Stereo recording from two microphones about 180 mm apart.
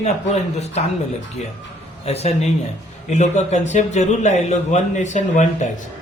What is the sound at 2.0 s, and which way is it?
Speech, 35° left (ahead or behind).